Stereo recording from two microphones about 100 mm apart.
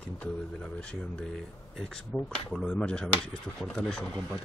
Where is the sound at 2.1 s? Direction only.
Centre (ahead or behind).